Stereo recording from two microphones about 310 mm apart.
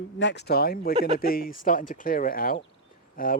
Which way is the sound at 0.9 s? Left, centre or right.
Right.